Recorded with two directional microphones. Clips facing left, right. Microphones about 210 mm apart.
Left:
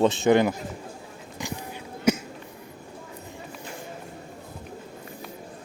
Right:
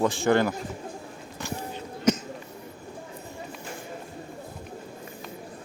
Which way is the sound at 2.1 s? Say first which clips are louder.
Left 1 dB; 10° left (ahead or behind).